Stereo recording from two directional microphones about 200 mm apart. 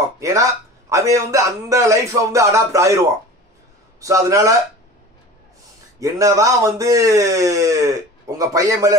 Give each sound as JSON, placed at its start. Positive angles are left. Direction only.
{"t": 0.2, "sound": "speech", "side_deg": -15}
{"t": 4.0, "sound": "speech", "side_deg": -15}
{"t": 5.9, "sound": "speech", "side_deg": -15}